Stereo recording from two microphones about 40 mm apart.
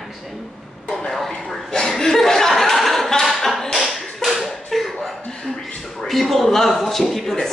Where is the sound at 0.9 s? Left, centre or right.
Centre.